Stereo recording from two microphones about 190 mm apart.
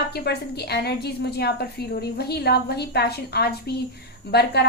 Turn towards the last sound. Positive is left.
turn(degrees=60)  # may be behind; listen again after turning